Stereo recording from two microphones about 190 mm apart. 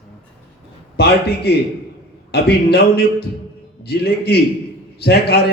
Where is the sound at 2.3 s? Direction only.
55° left (ahead or behind).